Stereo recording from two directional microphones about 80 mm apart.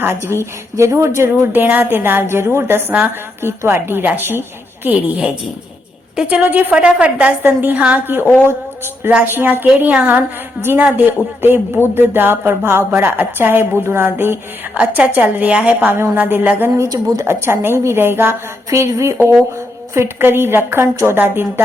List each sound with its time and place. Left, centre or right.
0.0 s a woman's voice: right
1.6 s a woman's voice: right
6.2 s a woman's voice: right
9.2 s a woman's voice: right
14.8 s a woman's voice: centre
16.9 s speech: right
17.2 s a woman's voice: right